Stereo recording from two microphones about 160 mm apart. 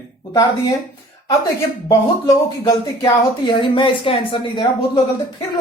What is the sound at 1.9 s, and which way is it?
Speech, 20° left (ahead or behind).